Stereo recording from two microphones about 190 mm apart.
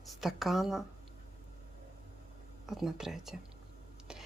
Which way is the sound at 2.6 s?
Centre (ahead or behind).